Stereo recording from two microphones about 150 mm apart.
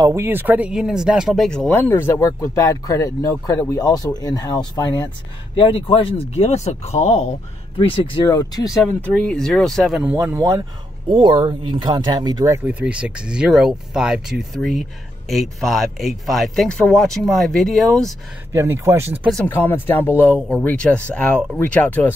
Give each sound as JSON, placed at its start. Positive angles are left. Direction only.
{"t": 0.0, "sound": "speech", "side_deg": -15}
{"t": 5.5, "sound": "speech", "side_deg": 35}
{"t": 7.7, "sound": "speech", "side_deg": 35}
{"t": 8.3, "sound": "speech", "side_deg": 25}
{"t": 9.0, "sound": "speech", "side_deg": 5}
{"t": 10.1, "sound": "speech", "side_deg": -15}
{"t": 11.1, "sound": "speech", "side_deg": -35}
{"t": 18.0, "sound": "speech", "side_deg": -20}
{"t": 19.4, "sound": "speech", "side_deg": 15}